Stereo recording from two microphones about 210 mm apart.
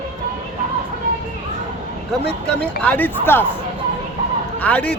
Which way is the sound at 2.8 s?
10° left (ahead or behind).